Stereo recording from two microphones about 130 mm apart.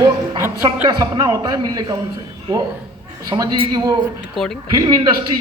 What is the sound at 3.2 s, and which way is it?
Speech, 30° right (ahead or behind).